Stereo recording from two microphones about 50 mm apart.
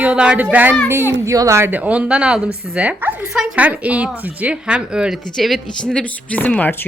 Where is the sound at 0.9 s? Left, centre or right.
Right.